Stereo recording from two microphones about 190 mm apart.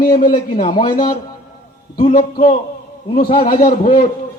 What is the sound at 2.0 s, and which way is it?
A man's voice, 50° left (ahead or behind).